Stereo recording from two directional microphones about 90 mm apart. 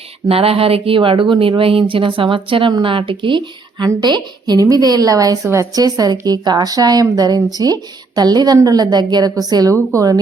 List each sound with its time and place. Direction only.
0.3 s speech: 90° right; by 3.8 s 65° right (ahead or behind)
4.0 s a woman's voice: 50° right (ahead or behind); by 5.8 s 35° right (ahead or behind)
5.8 s a woman's voice: 45° right (ahead or behind)